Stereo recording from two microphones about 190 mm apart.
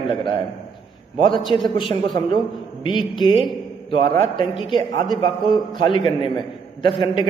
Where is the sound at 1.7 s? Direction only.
25° left (ahead or behind).